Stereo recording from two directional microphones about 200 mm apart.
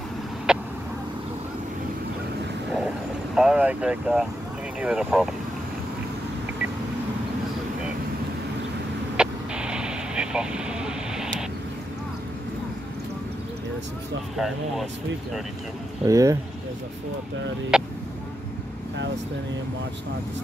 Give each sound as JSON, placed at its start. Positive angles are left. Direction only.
{"t": 0.5, "sound": "vehicle", "side_deg": -5}
{"t": 3.3, "sound": "speech", "side_deg": -5}
{"t": 9.1, "sound": "vehicle", "side_deg": -5}
{"t": 14.3, "sound": "speech", "side_deg": 0}
{"t": 16.1, "sound": "speech", "side_deg": -15}
{"t": 17.7, "sound": "speech", "side_deg": -5}